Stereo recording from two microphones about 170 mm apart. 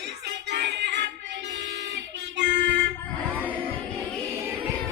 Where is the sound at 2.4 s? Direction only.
90° right.